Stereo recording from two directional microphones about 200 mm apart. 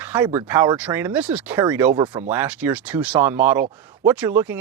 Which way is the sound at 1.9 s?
20° right (ahead or behind).